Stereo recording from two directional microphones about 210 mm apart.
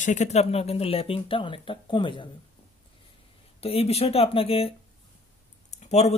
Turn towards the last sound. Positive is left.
turn(degrees=30)  # may be behind; listen again after turning